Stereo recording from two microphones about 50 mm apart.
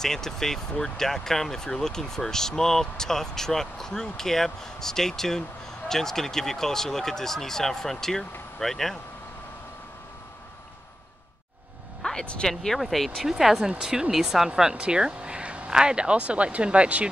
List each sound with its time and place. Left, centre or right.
0.0 s speech: centre
12.0 s vehicle: centre
12.4 s speech: centre
14.5 s speech: centre